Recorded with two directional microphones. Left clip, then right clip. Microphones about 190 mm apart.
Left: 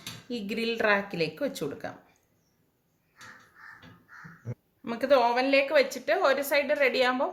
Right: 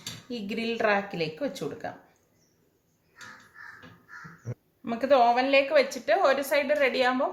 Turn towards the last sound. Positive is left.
turn(degrees=35)  # may be behind; listen again after turning